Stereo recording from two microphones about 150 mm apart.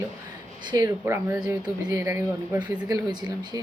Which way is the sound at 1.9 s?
20° right (ahead or behind).